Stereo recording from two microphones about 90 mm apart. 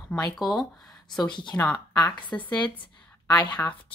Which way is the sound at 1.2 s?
55° left (ahead or behind).